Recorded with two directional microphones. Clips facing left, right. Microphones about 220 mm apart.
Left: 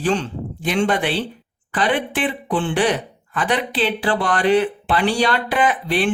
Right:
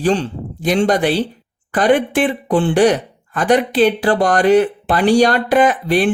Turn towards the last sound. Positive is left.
turn(degrees=-45)  # may be behind; listen again after turning